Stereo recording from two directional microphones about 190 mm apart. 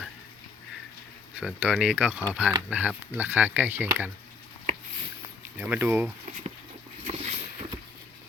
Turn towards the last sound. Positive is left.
turn(degrees=-35)  # may be behind; listen again after turning